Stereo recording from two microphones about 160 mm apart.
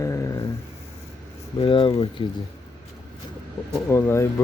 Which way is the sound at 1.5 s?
30° left (ahead or behind).